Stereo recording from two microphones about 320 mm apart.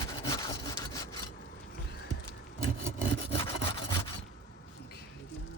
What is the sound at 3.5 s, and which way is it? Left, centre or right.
Sawing, centre.